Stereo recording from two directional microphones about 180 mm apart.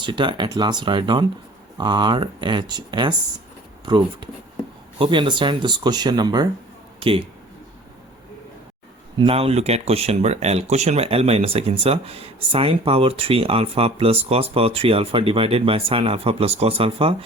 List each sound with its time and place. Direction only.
0.0 s speech: 25° right (ahead or behind)
9.1 s speech: 30° right (ahead or behind)